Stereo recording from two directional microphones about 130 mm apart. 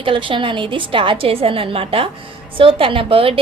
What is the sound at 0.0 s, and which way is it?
A woman's voice, 40° right (ahead or behind).